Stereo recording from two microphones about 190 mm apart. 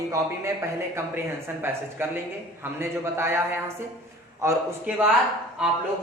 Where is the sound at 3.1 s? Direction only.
15° right (ahead or behind).